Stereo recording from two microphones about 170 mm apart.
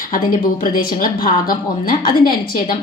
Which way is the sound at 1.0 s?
55° left (ahead or behind).